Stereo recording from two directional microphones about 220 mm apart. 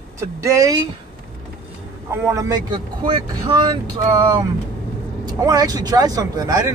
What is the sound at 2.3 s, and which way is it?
Speech, 15° right (ahead or behind).